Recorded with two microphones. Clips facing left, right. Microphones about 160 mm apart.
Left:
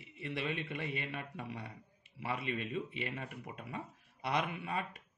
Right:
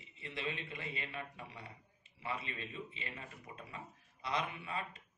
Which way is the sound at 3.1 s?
65° left (ahead or behind).